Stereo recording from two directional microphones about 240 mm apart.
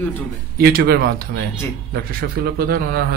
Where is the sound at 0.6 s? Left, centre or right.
Right.